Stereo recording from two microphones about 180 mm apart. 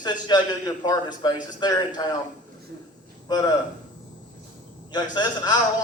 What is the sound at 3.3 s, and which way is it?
Speech, 25° left (ahead or behind).